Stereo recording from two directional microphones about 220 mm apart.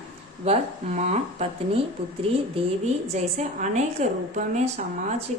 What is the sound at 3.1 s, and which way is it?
A woman's voice, 30° right (ahead or behind).